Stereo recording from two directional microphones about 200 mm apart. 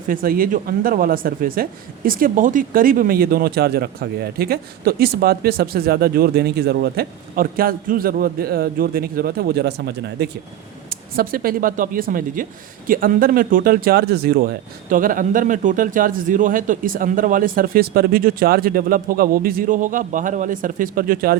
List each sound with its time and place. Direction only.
0.1 s speech: 45° right (ahead or behind)